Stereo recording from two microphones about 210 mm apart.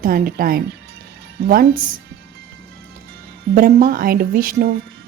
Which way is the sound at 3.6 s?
45° right (ahead or behind).